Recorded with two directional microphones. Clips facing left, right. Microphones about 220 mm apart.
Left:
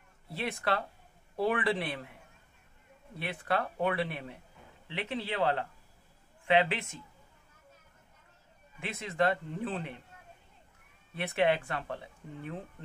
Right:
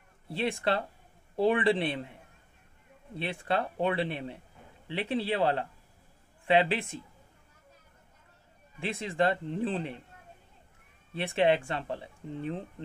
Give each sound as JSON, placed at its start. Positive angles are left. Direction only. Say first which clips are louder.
{"t": 0.3, "sound": "speech", "louder": "right 4 dB", "side_deg": -25}
{"t": 3.2, "sound": "speech", "louder": "right 2 dB", "side_deg": -25}
{"t": 8.7, "sound": "speech", "louder": "right 2 dB", "side_deg": -30}
{"t": 11.1, "sound": "speech", "louder": "right 3 dB", "side_deg": -25}